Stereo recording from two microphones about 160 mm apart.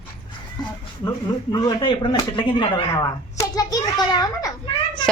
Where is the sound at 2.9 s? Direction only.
20° left (ahead or behind).